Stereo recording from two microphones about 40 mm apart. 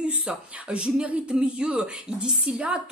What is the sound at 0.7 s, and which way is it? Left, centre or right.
Speech, right.